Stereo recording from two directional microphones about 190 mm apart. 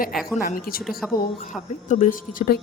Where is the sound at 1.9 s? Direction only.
45° left (ahead or behind).